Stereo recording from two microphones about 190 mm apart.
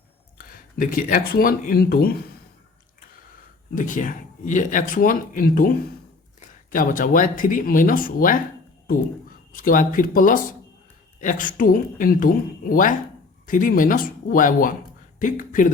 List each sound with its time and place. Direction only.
0.3 s speech: 45° left (ahead or behind)
3.8 s speech: 45° left (ahead or behind)
9.5 s speech: 45° left (ahead or behind)